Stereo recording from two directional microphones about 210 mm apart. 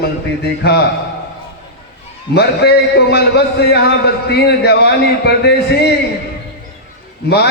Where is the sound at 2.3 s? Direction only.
50° left (ahead or behind).